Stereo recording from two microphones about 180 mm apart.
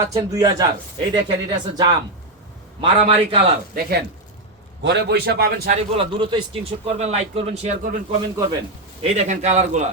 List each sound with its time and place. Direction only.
0.1 s a man's voice: 20° right (ahead or behind)
3.8 s a man's voice: 60° right (ahead or behind)
4.8 s a man's voice: 70° right (ahead or behind)
5.7 s a man's voice: 30° right (ahead or behind)
7.8 s a man's voice: 50° right (ahead or behind)
9.0 s a man's voice: 35° right (ahead or behind)